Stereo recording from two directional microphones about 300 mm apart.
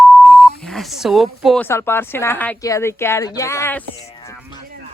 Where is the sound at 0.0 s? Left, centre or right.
Centre.